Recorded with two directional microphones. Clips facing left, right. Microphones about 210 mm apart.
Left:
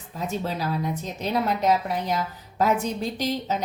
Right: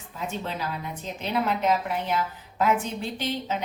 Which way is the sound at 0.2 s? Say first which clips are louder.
Left 3 dB; 40° left (ahead or behind).